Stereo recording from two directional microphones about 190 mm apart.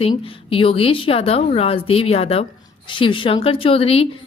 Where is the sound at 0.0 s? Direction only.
30° left (ahead or behind).